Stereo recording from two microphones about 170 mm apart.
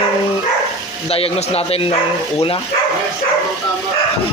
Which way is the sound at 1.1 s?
35° left (ahead or behind).